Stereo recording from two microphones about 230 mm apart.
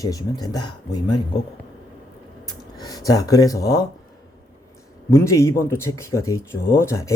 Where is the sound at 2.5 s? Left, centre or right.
Centre.